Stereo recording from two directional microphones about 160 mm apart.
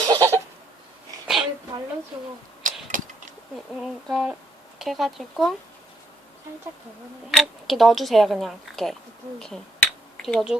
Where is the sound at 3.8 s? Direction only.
Centre (ahead or behind).